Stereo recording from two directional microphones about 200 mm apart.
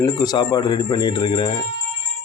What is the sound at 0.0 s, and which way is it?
Speech, 20° left (ahead or behind).